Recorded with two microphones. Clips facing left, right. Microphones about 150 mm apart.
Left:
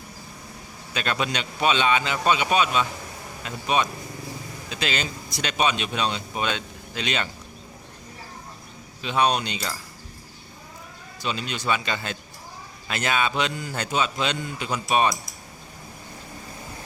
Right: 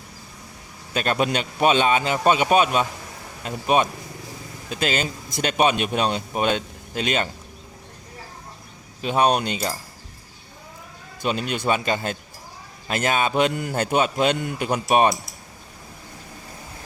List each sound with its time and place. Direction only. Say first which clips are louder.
0.9 s speech: right 5 dB; 45° right (ahead or behind)
9.0 s speech: right 3 dB; 45° right (ahead or behind)
11.2 s speech: right 5 dB; 50° right (ahead or behind)